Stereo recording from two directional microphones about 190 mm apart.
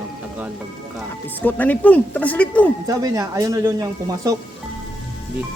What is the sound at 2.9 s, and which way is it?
Speech, 20° right (ahead or behind).